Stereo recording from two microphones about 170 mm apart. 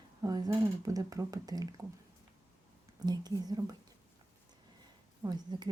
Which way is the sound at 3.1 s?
25° right (ahead or behind).